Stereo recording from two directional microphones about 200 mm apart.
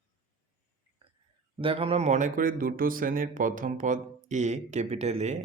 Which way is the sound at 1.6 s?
25° right (ahead or behind).